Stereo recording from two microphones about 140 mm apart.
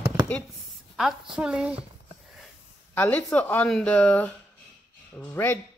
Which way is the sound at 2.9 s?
10° left (ahead or behind).